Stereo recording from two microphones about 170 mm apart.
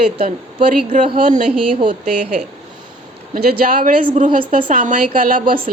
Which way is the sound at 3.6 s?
55° right (ahead or behind).